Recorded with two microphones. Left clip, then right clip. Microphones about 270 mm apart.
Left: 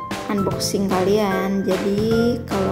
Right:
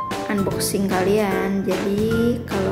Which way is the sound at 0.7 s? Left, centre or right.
Centre.